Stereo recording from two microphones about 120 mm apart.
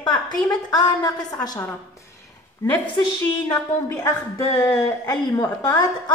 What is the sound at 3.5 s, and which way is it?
A woman's voice, 20° left (ahead or behind).